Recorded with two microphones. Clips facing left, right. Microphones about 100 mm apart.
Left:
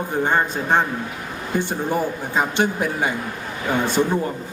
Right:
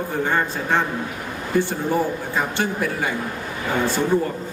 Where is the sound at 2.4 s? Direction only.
20° left (ahead or behind).